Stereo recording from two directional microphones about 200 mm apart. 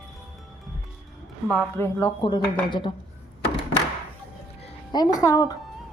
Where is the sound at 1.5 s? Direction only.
10° left (ahead or behind).